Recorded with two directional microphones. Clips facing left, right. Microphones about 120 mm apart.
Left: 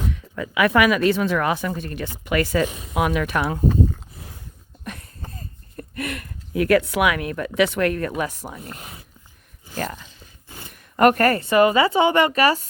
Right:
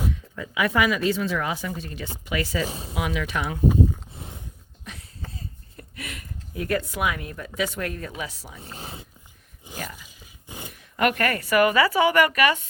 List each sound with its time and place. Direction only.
0.1 s speech: 75° left (ahead or behind); by 2.6 s 55° left (ahead or behind)
2.6 s speech: 30° right (ahead or behind)
2.9 s speech: 55° left (ahead or behind)
4.1 s a sound: 25° right (ahead or behind)
4.9 s a sound: 55° left (ahead or behind)
5.3 s speech: 50° left (ahead or behind)
8.6 s speech: 30° right (ahead or behind)
9.7 s a sound: 20° right (ahead or behind)
10.7 s a woman's voice: 45° left (ahead or behind)